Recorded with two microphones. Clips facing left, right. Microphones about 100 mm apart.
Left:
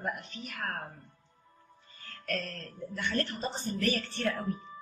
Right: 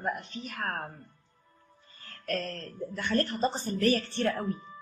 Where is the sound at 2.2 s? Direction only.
35° right (ahead or behind).